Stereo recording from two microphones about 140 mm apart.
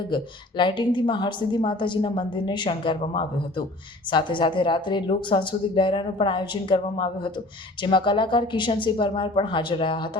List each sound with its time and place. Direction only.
0.1 s a woman's voice: 35° left (ahead or behind)
4.1 s a woman's voice: 35° left (ahead or behind)